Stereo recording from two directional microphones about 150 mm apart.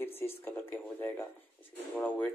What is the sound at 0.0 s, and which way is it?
Speech, 15° left (ahead or behind).